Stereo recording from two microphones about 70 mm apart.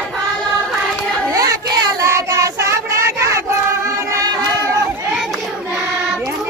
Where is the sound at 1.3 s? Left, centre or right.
Right.